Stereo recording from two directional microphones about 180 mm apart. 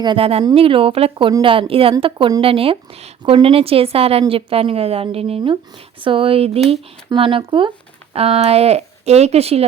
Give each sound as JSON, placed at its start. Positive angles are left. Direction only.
{"t": 0.0, "sound": "speech", "side_deg": -30}